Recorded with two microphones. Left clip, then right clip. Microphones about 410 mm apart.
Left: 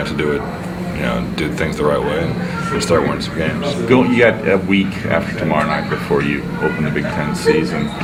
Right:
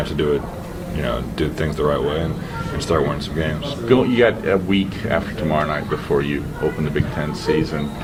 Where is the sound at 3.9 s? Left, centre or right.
Centre.